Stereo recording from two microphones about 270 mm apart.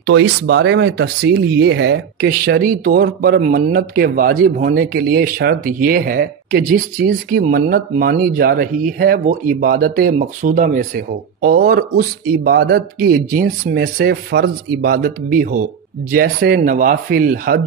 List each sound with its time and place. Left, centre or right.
0.0 s speech: right